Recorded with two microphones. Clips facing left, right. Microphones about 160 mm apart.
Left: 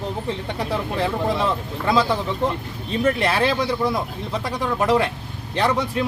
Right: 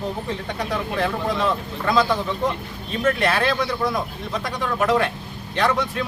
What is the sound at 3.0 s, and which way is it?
Speech, 30° left (ahead or behind).